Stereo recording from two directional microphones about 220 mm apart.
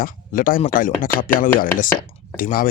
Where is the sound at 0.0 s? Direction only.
40° left (ahead or behind).